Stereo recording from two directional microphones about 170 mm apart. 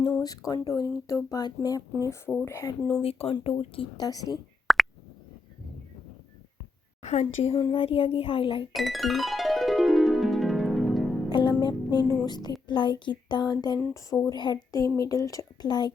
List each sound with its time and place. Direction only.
0.2 s speech: 20° left (ahead or behind)
3.0 s speech: 35° left (ahead or behind)
4.7 s plop: centre (ahead or behind)
7.0 s speech: 40° left (ahead or behind)
8.7 s music: centre (ahead or behind)
11.3 s music: 25° left (ahead or behind)
12.2 s speech: 25° left (ahead or behind)